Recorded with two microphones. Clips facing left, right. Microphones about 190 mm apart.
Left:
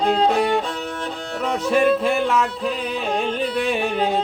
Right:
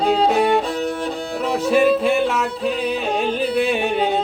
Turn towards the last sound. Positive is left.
turn(degrees=0)  # may be behind; listen again after turning